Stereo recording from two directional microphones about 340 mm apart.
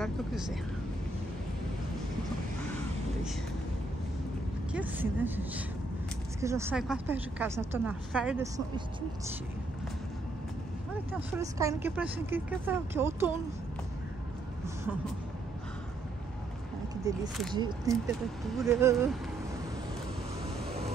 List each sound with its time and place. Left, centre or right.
0.0 s speech: centre
4.7 s a woman's voice: centre
11.1 s a woman's voice: centre
16.9 s a sound: centre
17.6 s a woman's voice: centre